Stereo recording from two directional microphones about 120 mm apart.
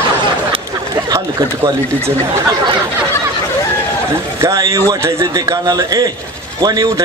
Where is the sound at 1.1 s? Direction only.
25° right (ahead or behind).